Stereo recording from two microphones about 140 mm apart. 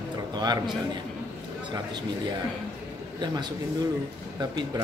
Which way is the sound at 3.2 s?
30° right (ahead or behind).